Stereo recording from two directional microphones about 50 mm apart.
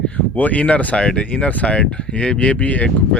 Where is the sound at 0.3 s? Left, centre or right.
Left.